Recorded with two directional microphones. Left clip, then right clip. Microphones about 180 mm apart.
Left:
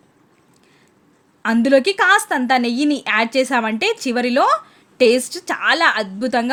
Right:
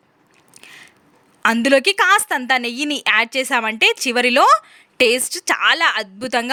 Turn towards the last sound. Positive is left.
turn(degrees=-20)  # may be behind; listen again after turning